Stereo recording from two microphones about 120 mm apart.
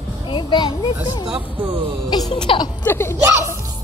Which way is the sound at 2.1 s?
40° left (ahead or behind).